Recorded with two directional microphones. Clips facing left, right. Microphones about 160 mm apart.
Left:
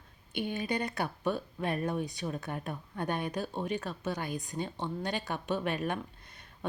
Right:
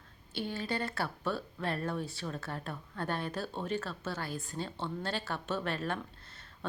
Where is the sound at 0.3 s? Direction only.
15° left (ahead or behind).